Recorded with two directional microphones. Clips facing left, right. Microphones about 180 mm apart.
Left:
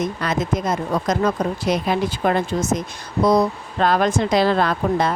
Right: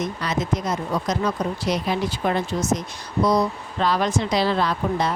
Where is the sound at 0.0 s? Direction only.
50° left (ahead or behind).